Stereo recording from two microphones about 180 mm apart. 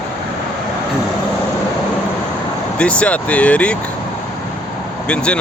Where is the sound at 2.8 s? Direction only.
5° left (ahead or behind).